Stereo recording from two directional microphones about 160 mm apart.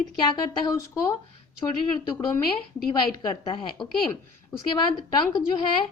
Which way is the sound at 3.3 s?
35° left (ahead or behind).